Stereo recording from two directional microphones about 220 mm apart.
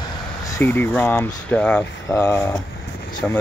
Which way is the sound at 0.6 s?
10° left (ahead or behind).